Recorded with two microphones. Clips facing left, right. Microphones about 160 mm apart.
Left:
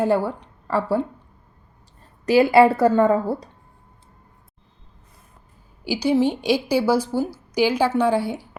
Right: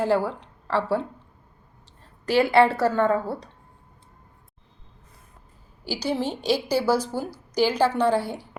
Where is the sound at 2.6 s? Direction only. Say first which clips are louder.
Left 5 dB; 10° left (ahead or behind).